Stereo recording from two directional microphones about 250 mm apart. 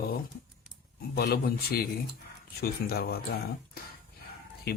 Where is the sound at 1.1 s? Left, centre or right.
Left.